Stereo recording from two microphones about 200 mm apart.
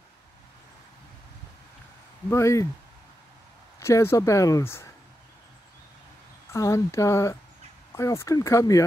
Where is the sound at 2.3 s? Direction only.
15° left (ahead or behind).